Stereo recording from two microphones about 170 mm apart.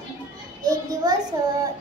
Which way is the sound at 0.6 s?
20° right (ahead or behind).